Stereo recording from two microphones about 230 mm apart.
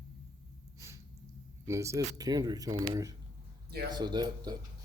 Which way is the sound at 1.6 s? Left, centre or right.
Centre.